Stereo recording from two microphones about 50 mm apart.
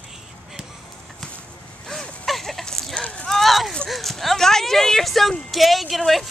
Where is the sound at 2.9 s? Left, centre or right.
Left.